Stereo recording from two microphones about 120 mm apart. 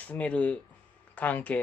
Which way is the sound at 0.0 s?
10° left (ahead or behind).